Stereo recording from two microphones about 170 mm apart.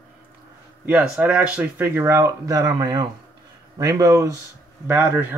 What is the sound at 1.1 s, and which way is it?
A woman's voice, 5° right (ahead or behind).